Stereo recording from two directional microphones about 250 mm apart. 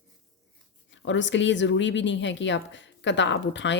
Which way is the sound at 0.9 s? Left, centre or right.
Left.